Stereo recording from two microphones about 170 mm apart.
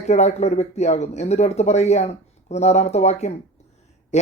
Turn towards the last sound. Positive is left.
turn(degrees=40)  # may be behind; listen again after turning